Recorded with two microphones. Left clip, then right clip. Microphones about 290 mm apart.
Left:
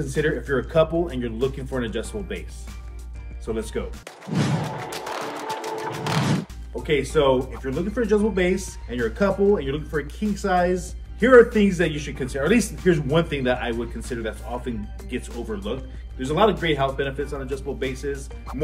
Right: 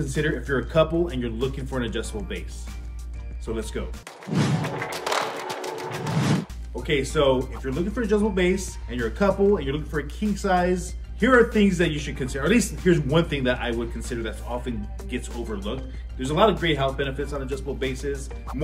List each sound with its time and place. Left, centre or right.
0.0 s speech: centre
3.4 s speech: centre
4.3 s thump: centre
5.5 s speech: centre